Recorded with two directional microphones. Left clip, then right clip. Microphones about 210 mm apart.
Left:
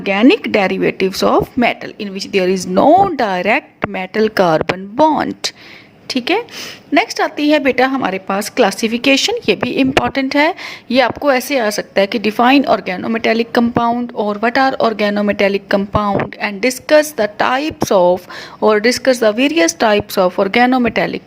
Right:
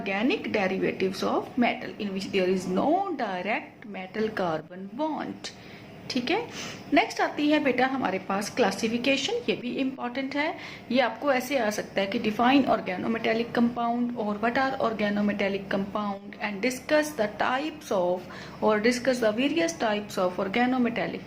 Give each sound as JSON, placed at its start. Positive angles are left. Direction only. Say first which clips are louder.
{"t": 0.0, "sound": "a woman's voice", "louder": "left 15 dB", "side_deg": 50}